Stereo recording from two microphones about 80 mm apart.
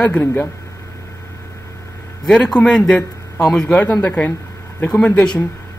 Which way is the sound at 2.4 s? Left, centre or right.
Centre.